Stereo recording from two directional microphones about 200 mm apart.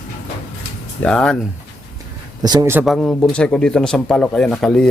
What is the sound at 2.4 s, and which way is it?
Speech, 20° right (ahead or behind).